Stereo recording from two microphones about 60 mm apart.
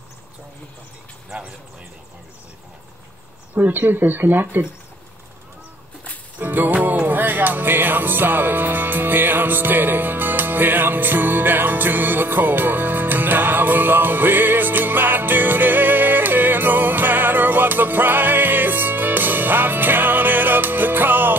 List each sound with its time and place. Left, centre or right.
3.5 s speech: right
6.3 s music: right